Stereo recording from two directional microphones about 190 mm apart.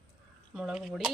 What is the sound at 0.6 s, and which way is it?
Speech, 5° right (ahead or behind).